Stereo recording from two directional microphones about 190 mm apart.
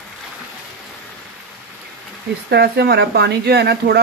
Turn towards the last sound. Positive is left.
turn(degrees=-60)  # may be behind; listen again after turning